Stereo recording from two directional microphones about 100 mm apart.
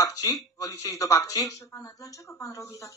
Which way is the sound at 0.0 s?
35° left (ahead or behind).